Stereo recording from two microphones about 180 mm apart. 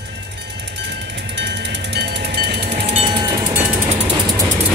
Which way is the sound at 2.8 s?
30° right (ahead or behind).